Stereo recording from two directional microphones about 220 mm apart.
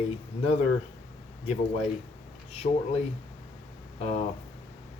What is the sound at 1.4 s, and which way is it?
Speech, 30° left (ahead or behind).